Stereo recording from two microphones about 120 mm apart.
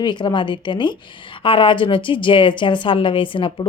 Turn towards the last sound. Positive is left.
turn(degrees=45)  # may be behind; listen again after turning